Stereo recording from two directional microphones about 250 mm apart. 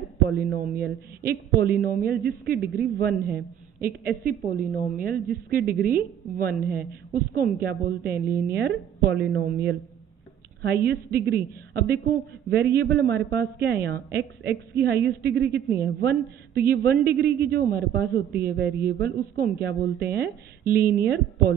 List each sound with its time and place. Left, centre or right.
0.3 s a man's voice: right